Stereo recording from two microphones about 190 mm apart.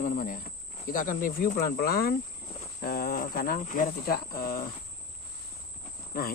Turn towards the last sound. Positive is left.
turn(degrees=50)  # may be behind; listen again after turning